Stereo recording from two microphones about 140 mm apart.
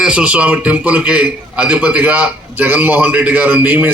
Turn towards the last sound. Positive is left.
turn(degrees=-10)  # may be behind; listen again after turning